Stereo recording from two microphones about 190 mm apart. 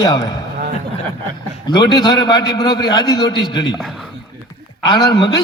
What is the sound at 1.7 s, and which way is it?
A man's voice, 20° left (ahead or behind).